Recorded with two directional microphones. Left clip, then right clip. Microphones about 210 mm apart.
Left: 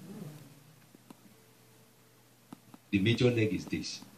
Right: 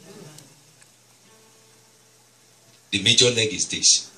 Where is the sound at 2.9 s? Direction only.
55° right (ahead or behind).